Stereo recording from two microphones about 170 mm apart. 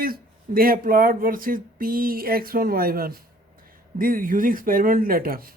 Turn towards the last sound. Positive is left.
turn(degrees=-60)  # may be behind; listen again after turning